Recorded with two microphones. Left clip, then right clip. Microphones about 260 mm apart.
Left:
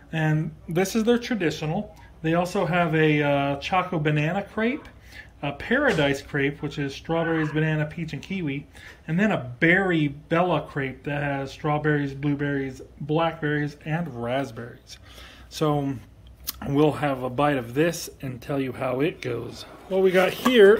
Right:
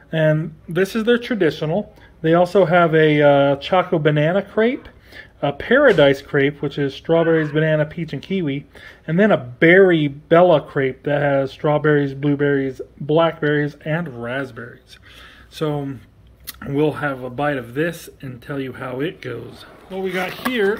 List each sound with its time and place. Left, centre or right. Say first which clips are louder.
0.1 s speech: right 10 dB; centre
0.7 s speech: right 5 dB; centre
1.2 s speech: right 7 dB; centre
14.1 s speech: right 2 dB; centre